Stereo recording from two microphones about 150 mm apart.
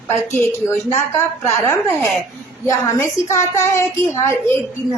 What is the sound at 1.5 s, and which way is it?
A woman's voice, 15° left (ahead or behind).